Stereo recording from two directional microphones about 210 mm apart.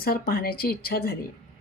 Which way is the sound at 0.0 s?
45° left (ahead or behind).